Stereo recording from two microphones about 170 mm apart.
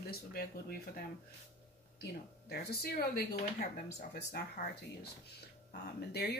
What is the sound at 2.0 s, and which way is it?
Speech, 70° left (ahead or behind).